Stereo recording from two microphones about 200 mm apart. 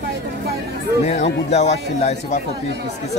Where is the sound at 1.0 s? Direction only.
35° left (ahead or behind).